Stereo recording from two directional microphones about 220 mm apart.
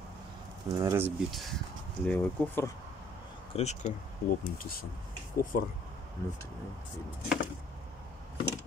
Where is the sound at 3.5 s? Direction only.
30° left (ahead or behind).